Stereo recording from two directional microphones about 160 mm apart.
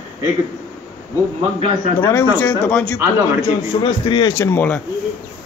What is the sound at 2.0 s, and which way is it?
Speech, 15° left (ahead or behind).